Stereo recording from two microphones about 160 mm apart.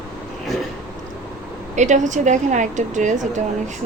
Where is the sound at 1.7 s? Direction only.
50° right (ahead or behind).